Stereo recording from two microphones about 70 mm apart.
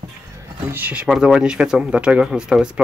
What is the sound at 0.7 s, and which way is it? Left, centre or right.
Speech, right.